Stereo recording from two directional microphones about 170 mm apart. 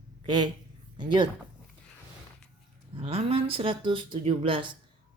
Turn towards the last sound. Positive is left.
turn(degrees=-30)  # may be behind; listen again after turning